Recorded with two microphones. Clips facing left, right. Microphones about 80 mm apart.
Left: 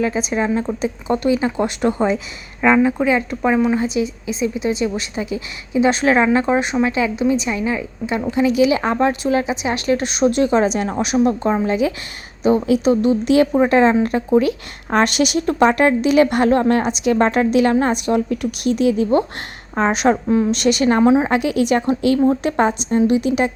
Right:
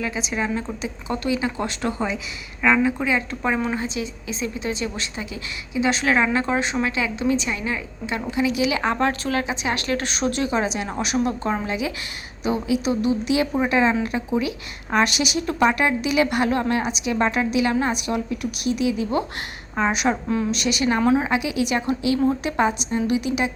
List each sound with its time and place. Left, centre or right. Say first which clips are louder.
0.0 s speech: left 7 dB; left
10.4 s speech: left 7 dB; left
11.6 s a woman's voice: left 8 dB; left
14.8 s a woman's voice: left 5 dB; left
21.0 s speech: left 5 dB; left
21.2 s a woman's voice: left 6 dB; left